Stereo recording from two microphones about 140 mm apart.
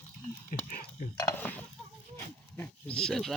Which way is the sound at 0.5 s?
75° left (ahead or behind).